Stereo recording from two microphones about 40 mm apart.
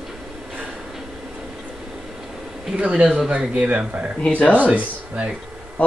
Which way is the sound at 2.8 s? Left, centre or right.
Right.